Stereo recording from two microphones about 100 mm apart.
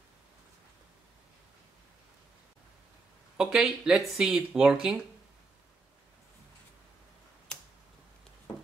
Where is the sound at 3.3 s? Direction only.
5° right (ahead or behind).